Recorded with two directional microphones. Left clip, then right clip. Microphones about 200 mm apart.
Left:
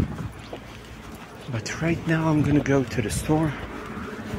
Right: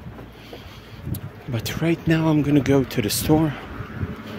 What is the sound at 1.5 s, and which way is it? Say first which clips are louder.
Speech: right 3 dB; 40° right (ahead or behind).